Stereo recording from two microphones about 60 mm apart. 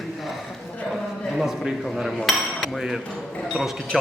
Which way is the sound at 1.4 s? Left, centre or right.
Centre.